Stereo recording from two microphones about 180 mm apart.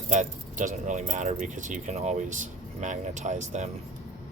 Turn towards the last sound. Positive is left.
turn(degrees=-45)  # may be behind; listen again after turning